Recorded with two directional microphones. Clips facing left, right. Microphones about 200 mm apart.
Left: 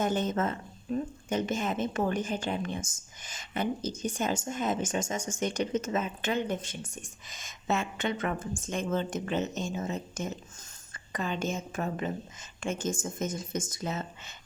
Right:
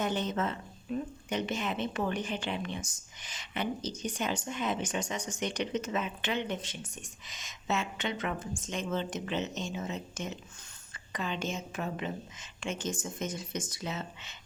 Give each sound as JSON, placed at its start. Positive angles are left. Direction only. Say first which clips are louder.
{"t": 0.0, "sound": "speech", "louder": "left 3 dB", "side_deg": 45}